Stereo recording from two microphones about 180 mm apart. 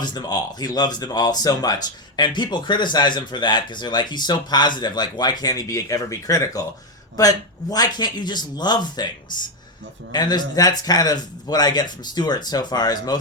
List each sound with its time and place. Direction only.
0.0 s speech: 25° left (ahead or behind)